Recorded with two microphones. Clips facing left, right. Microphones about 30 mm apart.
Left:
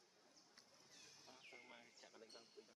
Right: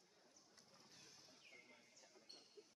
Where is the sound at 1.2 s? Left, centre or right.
Left.